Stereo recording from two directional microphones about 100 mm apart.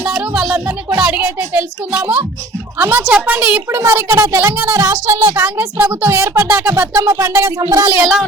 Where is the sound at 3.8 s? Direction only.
30° right (ahead or behind).